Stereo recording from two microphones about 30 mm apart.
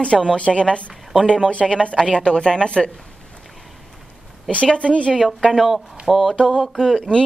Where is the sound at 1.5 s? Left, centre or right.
Left.